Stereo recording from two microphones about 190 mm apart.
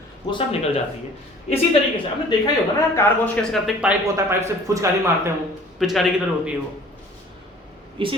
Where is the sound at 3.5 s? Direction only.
5° right (ahead or behind).